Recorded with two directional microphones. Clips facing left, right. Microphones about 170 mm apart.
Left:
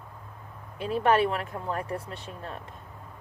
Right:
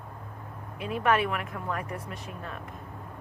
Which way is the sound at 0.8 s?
30° left (ahead or behind).